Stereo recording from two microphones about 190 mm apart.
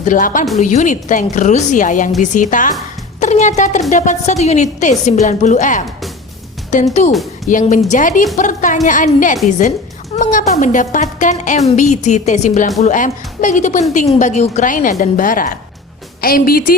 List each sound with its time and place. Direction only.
0.0 s a woman's voice: 45° left (ahead or behind)
7.1 s speech: centre (ahead or behind)
7.5 s a woman's voice: 40° left (ahead or behind)